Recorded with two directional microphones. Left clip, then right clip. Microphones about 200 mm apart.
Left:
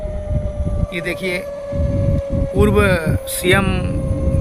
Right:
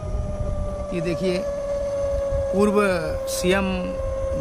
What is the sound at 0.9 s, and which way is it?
Speech, 10° left (ahead or behind).